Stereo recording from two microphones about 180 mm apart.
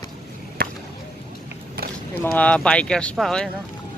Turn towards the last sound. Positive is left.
turn(degrees=0)  # may be behind; listen again after turning